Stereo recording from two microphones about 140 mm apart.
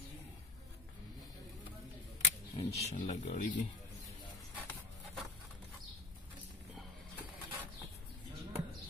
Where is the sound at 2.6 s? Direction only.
50° left (ahead or behind).